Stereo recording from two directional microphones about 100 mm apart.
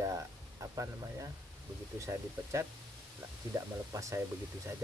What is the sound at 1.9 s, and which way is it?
Speech, 30° right (ahead or behind).